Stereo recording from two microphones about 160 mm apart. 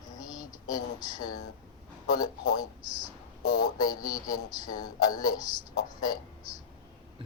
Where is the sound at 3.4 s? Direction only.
90° left.